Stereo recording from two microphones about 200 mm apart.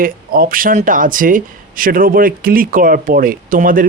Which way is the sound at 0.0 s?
45° right (ahead or behind).